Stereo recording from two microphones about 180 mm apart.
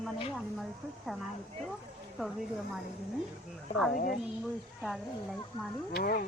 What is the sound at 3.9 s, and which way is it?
Speech, 50° left (ahead or behind).